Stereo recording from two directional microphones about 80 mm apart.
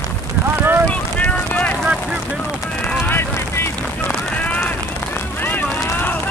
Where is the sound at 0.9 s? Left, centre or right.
Centre.